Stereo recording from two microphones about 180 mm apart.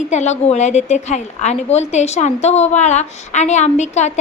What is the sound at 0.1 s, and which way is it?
A woman's voice, 40° left (ahead or behind).